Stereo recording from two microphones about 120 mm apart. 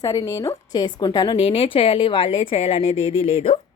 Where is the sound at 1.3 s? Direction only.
50° left (ahead or behind).